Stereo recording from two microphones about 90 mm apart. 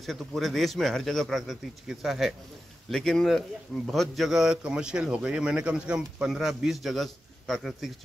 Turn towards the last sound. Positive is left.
turn(degrees=0)  # may be behind; listen again after turning